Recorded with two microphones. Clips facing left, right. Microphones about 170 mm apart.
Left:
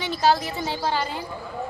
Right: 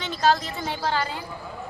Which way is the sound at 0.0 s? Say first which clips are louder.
Left 1 dB; 10° left (ahead or behind).